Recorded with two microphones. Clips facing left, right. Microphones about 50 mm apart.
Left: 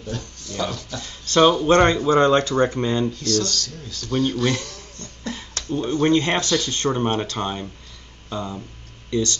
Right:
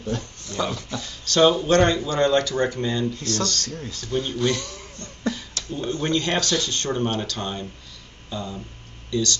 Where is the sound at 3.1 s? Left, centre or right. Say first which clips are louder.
Left 3 dB; right.